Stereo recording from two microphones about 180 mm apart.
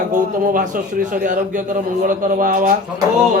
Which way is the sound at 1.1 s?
45° right (ahead or behind).